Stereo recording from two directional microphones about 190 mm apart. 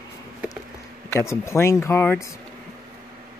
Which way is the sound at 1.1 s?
15° left (ahead or behind).